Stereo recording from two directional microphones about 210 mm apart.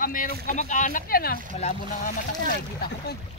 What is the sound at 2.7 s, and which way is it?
Speech, 50° left (ahead or behind).